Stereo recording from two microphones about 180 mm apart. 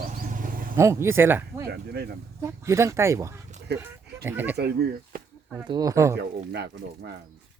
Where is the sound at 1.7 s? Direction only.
65° right (ahead or behind).